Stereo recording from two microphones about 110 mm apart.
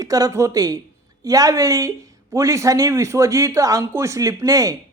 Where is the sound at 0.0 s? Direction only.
30° right (ahead or behind).